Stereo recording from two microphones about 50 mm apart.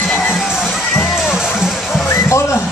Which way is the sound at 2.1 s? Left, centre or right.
Left.